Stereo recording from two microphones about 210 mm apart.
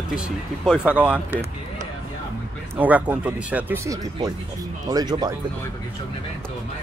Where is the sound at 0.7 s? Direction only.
5° right (ahead or behind).